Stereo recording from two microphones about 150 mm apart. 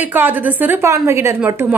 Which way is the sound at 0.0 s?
10° right (ahead or behind).